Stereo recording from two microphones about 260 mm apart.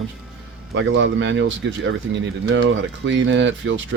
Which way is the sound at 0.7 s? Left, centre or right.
Right.